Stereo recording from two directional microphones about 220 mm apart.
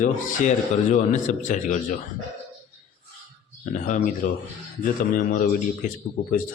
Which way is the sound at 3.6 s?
35° left (ahead or behind).